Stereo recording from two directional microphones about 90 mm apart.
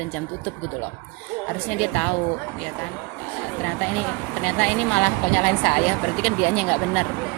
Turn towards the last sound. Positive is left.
turn(degrees=20)  # may be behind; listen again after turning